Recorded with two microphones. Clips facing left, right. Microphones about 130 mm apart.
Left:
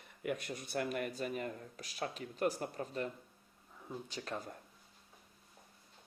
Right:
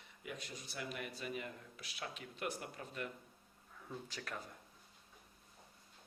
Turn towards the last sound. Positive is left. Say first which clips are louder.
# left 4 dB
turn(degrees=25)  # may be behind; listen again after turning